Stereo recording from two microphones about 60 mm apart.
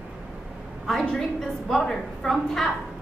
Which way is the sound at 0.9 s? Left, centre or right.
Centre.